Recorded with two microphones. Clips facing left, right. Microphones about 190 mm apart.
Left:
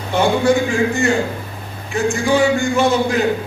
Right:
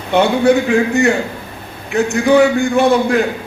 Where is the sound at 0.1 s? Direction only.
65° right (ahead or behind).